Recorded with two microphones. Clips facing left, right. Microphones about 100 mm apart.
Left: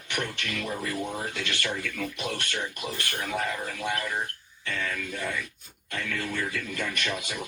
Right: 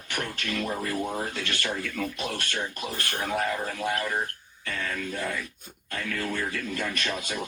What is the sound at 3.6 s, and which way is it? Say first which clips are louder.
Speech: right 2 dB; 30° right (ahead or behind).